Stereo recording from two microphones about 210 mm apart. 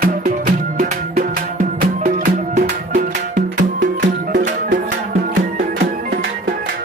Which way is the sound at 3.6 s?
55° right (ahead or behind).